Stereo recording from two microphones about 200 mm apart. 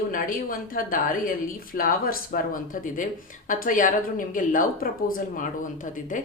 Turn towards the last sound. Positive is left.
turn(degrees=40)  # may be behind; listen again after turning